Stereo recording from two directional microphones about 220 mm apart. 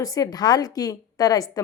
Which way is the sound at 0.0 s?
15° left (ahead or behind).